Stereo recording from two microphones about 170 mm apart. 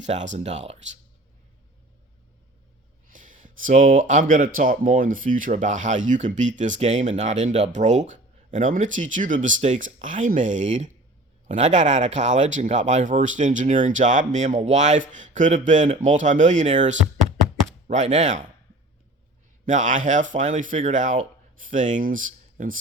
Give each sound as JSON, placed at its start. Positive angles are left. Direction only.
{"t": 0.0, "sound": "speech", "side_deg": -45}
{"t": 3.1, "sound": "speech", "side_deg": -50}
{"t": 19.6, "sound": "speech", "side_deg": -45}